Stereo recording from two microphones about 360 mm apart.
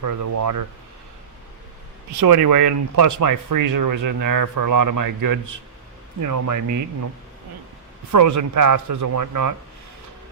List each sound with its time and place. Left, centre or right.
0.0 s speech: right
2.4 s speech: right
8.1 s speech: right